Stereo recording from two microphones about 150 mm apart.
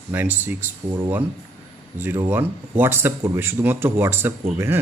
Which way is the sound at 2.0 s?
15° right (ahead or behind).